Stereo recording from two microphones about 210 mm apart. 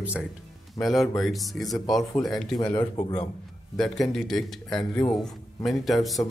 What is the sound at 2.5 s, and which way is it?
Speech, 20° left (ahead or behind).